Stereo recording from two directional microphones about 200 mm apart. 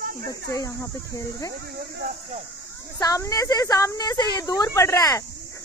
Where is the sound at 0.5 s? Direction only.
15° left (ahead or behind).